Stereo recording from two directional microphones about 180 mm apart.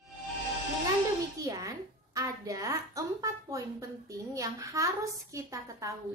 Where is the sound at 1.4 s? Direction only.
20° right (ahead or behind).